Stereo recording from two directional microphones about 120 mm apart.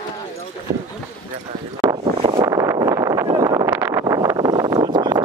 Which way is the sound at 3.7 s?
20° right (ahead or behind).